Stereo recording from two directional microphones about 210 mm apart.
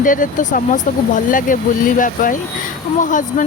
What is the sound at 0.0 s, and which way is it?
Speech, 40° left (ahead or behind).